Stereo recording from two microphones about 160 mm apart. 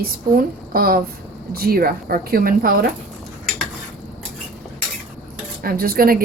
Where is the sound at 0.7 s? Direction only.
70° right (ahead or behind).